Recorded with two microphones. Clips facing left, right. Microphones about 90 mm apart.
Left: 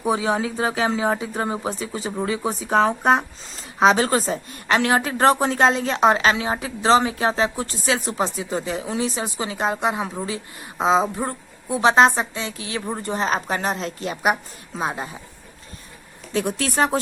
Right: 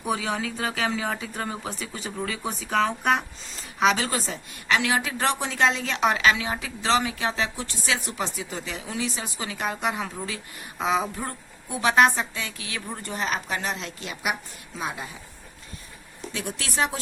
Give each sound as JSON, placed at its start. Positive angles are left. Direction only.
{"t": 0.0, "sound": "speech", "side_deg": 30}
{"t": 16.3, "sound": "speech", "side_deg": 40}